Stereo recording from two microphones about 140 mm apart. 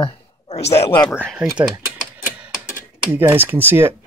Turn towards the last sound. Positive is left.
turn(degrees=-15)  # may be behind; listen again after turning